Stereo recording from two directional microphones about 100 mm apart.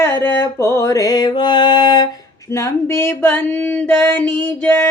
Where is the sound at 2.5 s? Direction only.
30° left (ahead or behind).